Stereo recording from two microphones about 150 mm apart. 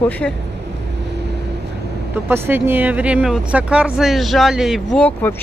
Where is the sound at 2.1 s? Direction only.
15° right (ahead or behind).